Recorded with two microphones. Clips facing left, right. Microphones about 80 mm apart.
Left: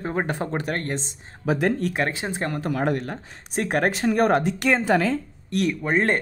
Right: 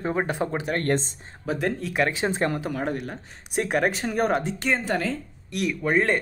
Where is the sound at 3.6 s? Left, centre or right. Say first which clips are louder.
Left 4 dB; left.